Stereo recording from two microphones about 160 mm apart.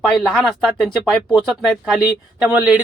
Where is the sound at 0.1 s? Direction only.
Centre (ahead or behind).